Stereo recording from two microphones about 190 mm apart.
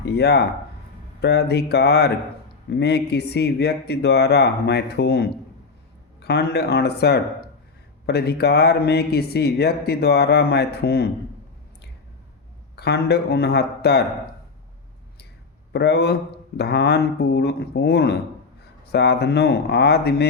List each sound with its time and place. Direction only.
0.0 s speech: 60° left (ahead or behind)
12.7 s speech: 60° left (ahead or behind)
15.7 s speech: 60° left (ahead or behind)